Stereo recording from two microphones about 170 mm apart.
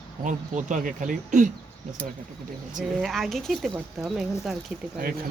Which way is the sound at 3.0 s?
Centre (ahead or behind).